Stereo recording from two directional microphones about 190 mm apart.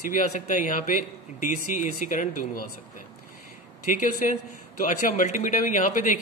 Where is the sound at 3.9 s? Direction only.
45° left (ahead or behind).